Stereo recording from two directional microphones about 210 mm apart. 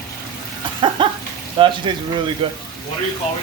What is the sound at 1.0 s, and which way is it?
Speech, 25° right (ahead or behind).